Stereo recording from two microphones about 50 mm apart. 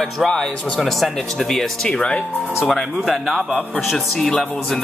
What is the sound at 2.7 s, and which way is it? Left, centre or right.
Speech, centre.